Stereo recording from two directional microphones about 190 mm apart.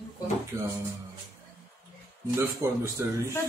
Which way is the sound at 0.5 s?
15° right (ahead or behind).